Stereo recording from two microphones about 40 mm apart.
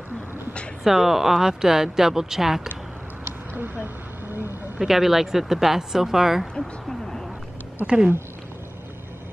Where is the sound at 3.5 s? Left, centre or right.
Right.